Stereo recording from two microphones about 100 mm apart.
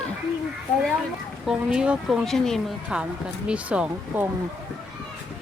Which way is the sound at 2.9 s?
10° right (ahead or behind).